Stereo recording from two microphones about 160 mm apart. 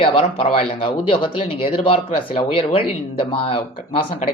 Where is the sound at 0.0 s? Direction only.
35° left (ahead or behind).